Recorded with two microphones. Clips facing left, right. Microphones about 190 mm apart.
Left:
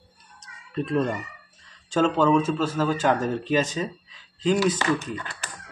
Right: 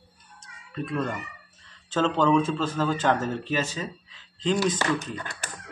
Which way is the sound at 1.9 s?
10° left (ahead or behind).